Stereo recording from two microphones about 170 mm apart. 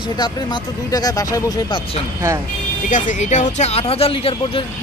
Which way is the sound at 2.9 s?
45° left (ahead or behind).